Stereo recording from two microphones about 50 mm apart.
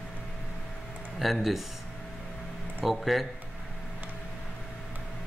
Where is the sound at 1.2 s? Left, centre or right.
Centre.